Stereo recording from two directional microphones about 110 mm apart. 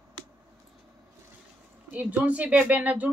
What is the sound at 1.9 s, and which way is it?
A woman's voice, 15° right (ahead or behind).